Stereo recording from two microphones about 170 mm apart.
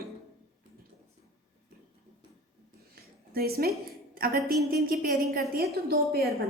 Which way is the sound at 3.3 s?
65° right (ahead or behind).